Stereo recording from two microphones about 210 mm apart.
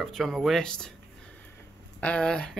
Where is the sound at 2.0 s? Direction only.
5° left (ahead or behind).